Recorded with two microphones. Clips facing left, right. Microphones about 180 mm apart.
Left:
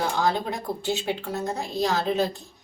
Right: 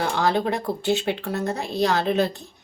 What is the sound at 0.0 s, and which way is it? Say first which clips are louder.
A woman's voice: right 3 dB; 70° right (ahead or behind).